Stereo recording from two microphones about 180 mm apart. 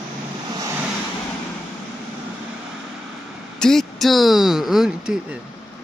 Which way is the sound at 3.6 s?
Centre (ahead or behind).